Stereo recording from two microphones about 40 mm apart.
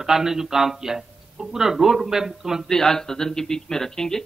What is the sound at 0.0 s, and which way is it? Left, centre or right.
A man's voice, centre.